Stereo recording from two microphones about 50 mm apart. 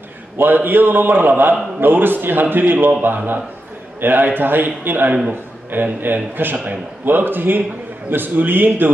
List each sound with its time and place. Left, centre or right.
0.4 s a man's voice: right